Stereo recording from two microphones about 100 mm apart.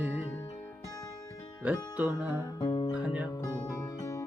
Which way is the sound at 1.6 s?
20° right (ahead or behind).